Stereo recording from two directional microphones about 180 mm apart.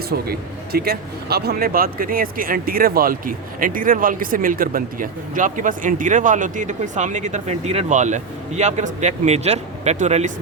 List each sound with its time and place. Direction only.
0.1 s speech: 60° right (ahead or behind); by 10.3 s 40° right (ahead or behind)